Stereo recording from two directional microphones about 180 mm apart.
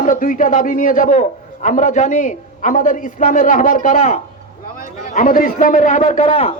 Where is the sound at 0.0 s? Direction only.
45° left (ahead or behind).